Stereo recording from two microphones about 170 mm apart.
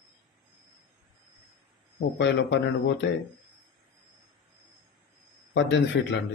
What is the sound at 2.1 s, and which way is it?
Speech, 90° left.